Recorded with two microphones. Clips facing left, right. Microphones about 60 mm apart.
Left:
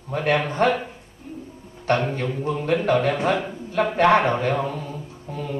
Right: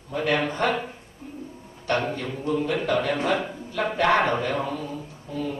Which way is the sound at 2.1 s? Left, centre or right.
Left.